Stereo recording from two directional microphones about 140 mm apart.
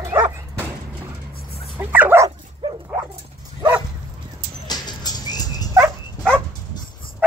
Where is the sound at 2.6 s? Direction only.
35° right (ahead or behind).